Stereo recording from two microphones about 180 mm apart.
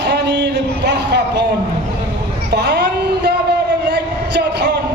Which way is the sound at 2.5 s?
70° right (ahead or behind).